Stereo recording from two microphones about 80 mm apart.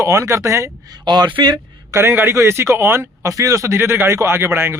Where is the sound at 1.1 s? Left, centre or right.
Right.